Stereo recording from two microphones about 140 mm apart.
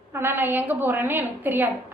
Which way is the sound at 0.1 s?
15° right (ahead or behind).